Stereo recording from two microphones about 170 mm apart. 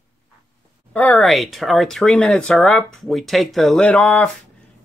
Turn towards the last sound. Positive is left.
turn(degrees=5)  # may be behind; listen again after turning